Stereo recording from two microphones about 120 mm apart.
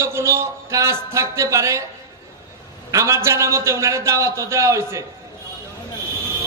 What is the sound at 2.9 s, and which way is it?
A man's voice, 25° right (ahead or behind).